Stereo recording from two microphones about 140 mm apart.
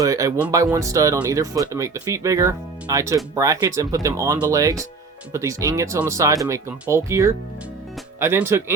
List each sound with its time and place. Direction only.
0.0 s speech: 25° right (ahead or behind)